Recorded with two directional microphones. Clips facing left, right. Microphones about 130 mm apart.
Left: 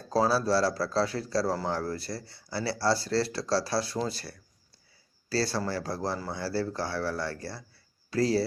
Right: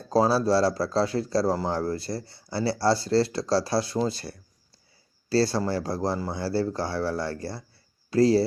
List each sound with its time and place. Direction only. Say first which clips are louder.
0.1 s speech: right 4 dB; 20° right (ahead or behind)